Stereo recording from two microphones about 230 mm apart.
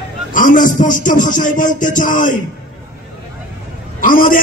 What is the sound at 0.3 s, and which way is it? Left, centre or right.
A man's voice, left.